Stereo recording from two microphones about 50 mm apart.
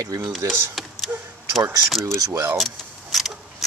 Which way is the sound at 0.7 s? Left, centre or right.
Centre.